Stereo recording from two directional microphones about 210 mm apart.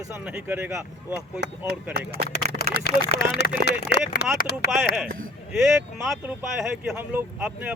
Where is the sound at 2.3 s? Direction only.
50° left (ahead or behind).